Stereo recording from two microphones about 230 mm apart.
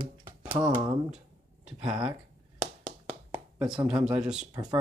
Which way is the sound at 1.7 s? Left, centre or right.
Centre.